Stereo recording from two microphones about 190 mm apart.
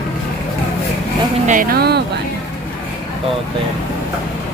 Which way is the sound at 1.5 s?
50° right (ahead or behind).